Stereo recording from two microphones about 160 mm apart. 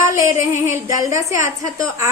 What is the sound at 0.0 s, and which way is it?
A woman's voice, 15° right (ahead or behind).